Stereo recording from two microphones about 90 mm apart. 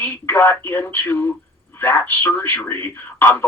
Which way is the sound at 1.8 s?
25° left (ahead or behind).